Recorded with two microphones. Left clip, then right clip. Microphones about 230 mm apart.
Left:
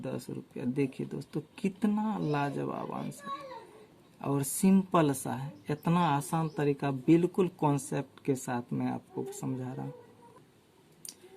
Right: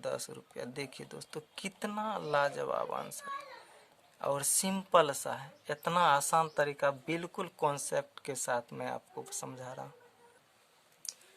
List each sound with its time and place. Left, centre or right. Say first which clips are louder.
0.0 s speech: right 1 dB; right
4.2 s speech: left 1 dB; right